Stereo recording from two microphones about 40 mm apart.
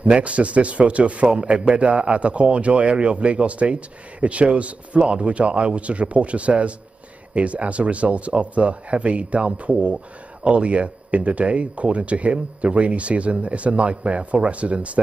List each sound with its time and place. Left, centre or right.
0.0 s speech: right